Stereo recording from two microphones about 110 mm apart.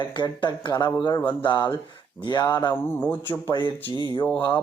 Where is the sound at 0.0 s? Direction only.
45° left (ahead or behind).